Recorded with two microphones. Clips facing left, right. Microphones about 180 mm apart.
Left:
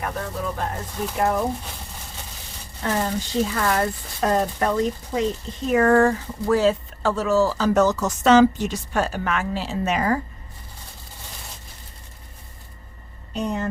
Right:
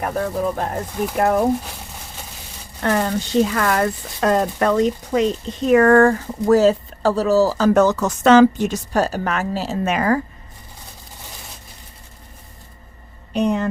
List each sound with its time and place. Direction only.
0.0 s speech: 45° right (ahead or behind)
2.8 s speech: 65° right (ahead or behind)
8.9 s a woman's voice: 40° right (ahead or behind)
9.9 s speech: 65° right (ahead or behind)
13.3 s speech: 70° right (ahead or behind)